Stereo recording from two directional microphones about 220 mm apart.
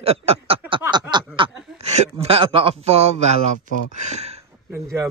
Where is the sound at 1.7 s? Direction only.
30° right (ahead or behind).